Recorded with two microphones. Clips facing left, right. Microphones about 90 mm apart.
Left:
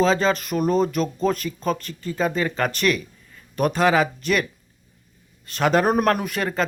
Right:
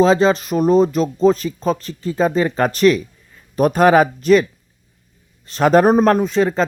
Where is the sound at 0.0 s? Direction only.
35° right (ahead or behind).